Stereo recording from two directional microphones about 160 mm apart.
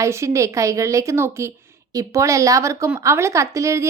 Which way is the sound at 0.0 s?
20° right (ahead or behind).